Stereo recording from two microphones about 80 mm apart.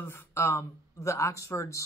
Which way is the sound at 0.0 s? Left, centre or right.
Left.